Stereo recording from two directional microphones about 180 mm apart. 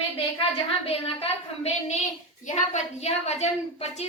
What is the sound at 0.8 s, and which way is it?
A woman's voice, 35° left (ahead or behind).